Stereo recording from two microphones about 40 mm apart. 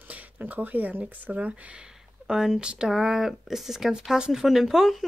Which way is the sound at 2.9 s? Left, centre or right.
Centre.